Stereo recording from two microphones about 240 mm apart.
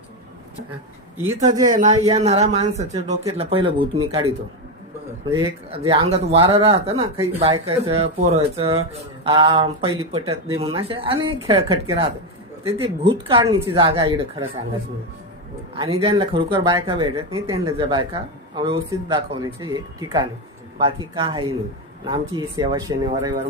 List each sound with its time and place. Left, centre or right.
1.2 s speech: centre
1.6 s speech: right
5.3 s speech: centre
15.7 s speech: right